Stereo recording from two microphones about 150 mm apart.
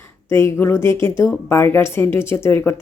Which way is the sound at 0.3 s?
15° left (ahead or behind).